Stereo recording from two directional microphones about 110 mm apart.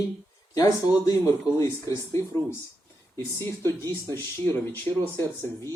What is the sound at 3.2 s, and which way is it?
Speech, 25° left (ahead or behind).